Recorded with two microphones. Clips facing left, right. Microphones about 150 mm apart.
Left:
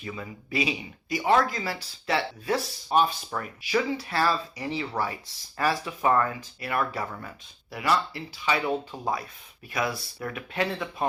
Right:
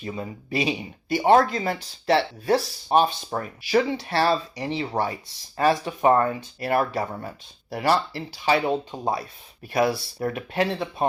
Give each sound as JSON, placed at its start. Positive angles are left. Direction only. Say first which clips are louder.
{"t": 0.0, "sound": "speech", "louder": "right 5 dB", "side_deg": -35}